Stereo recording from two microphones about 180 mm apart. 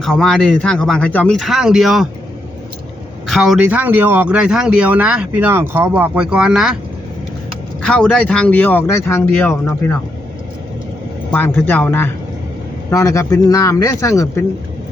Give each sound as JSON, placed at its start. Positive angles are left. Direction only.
{"t": 0.0, "sound": "speech", "side_deg": 0}
{"t": 3.2, "sound": "speech", "side_deg": 0}
{"t": 7.8, "sound": "speech", "side_deg": 5}
{"t": 11.3, "sound": "speech", "side_deg": 10}